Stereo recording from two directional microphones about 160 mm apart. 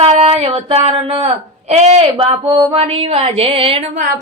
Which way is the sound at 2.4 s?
30° right (ahead or behind).